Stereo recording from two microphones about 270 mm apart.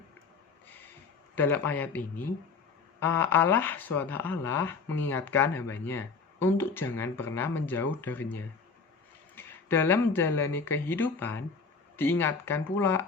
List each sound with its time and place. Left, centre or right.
1.4 s speech: centre